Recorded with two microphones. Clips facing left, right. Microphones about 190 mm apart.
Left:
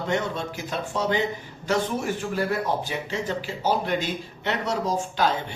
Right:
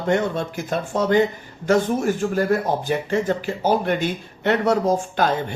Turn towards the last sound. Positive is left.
turn(degrees=-50)  # may be behind; listen again after turning